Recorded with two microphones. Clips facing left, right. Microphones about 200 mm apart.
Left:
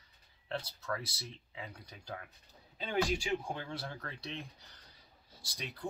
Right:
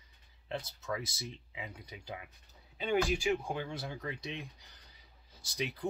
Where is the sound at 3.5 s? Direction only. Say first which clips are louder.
Right 3 dB; 15° right (ahead or behind).